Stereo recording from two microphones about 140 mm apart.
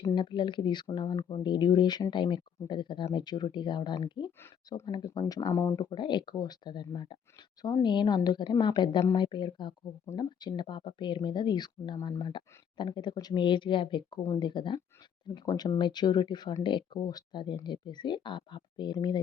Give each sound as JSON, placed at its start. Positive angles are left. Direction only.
{"t": 0.0, "sound": "speech", "side_deg": 35}